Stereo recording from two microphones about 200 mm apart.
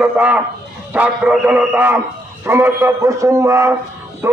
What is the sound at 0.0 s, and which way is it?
A man's voice, 5° right (ahead or behind).